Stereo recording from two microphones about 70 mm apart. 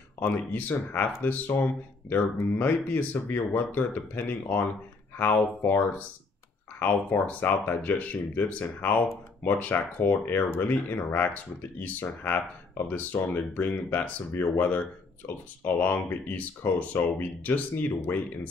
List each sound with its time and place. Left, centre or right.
0.2 s speech: left